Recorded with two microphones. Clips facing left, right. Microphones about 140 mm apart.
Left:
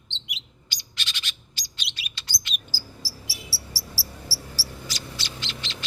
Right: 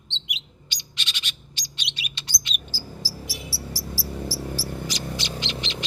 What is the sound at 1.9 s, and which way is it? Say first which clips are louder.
Chirp: right 2 dB; 20° right (ahead or behind).